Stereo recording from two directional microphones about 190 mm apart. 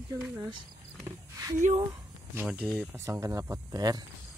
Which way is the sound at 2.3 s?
10° right (ahead or behind).